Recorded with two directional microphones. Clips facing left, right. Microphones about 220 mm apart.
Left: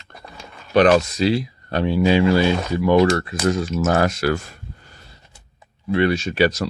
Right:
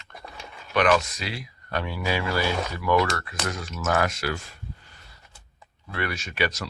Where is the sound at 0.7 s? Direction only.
35° left (ahead or behind).